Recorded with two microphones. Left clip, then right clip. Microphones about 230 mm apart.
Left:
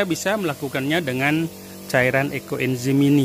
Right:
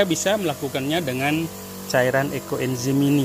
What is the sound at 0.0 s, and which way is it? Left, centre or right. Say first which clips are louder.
Speech: right 2 dB; centre.